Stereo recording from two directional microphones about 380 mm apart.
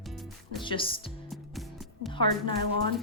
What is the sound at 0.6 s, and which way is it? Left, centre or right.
Speech, centre.